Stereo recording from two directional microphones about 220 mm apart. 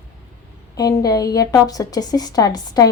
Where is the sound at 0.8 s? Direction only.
15° left (ahead or behind).